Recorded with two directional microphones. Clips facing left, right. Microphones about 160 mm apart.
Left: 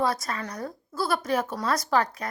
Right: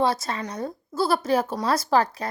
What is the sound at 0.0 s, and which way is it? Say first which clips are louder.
A woman's voice: right 3 dB; 25° right (ahead or behind).